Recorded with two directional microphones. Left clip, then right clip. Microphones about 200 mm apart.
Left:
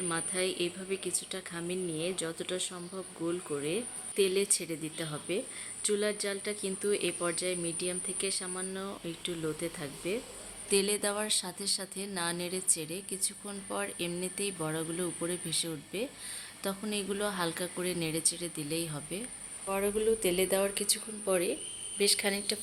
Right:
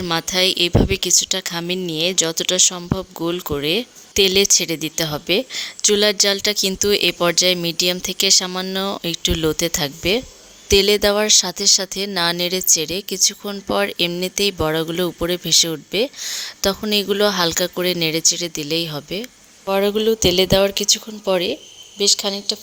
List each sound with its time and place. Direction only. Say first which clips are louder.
0.0 s speech: right 15 dB; 50° right (ahead or behind); by 22.5 s 30° right (ahead or behind)